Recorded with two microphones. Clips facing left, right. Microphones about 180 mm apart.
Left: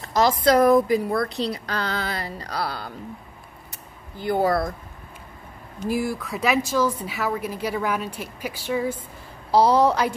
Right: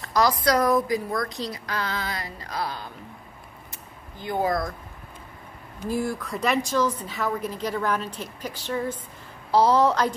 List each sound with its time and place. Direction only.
0.0 s a woman's voice: 25° left (ahead or behind)
3.7 s a sound: 35° left (ahead or behind)
5.9 s a woman's voice: 5° left (ahead or behind)